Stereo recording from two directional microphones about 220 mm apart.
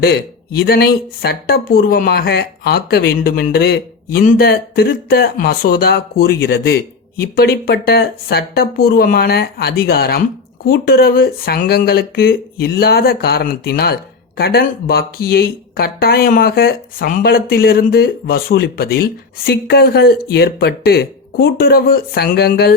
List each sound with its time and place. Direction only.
0.0 s speech: 45° left (ahead or behind)